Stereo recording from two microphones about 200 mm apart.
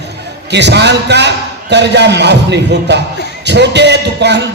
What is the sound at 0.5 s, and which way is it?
A man's voice, 60° right (ahead or behind).